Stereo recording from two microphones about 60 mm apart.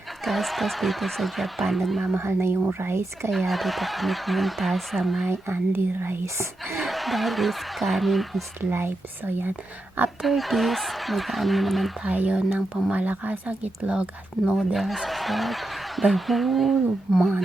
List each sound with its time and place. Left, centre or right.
0.3 s speech: centre
2.2 s speech: right
2.9 s speech: right
3.3 s speech: centre
5.3 s speech: right
6.2 s speech: right
6.7 s speech: centre
8.7 s speech: right
10.2 s speech: centre
12.0 s speech: right
14.4 s speech: centre